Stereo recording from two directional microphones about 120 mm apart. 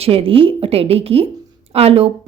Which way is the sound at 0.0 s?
55° right (ahead or behind).